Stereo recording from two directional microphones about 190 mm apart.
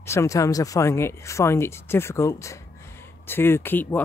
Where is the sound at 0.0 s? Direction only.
15° left (ahead or behind).